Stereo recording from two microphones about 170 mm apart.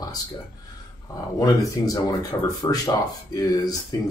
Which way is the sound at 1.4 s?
20° left (ahead or behind).